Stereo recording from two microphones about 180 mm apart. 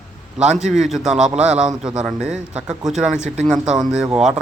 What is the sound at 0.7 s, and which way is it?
A man's voice, centre (ahead or behind).